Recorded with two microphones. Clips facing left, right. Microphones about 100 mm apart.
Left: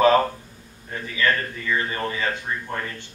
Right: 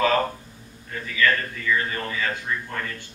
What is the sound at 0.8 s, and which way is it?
A man's voice, 25° left (ahead or behind).